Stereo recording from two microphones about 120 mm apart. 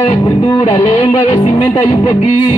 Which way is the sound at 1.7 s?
35° left (ahead or behind).